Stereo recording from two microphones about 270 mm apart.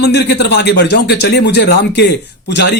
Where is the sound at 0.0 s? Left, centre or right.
Left.